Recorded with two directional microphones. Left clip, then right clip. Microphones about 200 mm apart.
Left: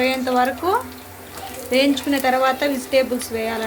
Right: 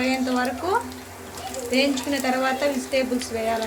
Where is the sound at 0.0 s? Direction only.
20° left (ahead or behind).